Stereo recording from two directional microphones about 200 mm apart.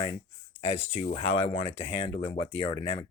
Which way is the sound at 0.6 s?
30° left (ahead or behind).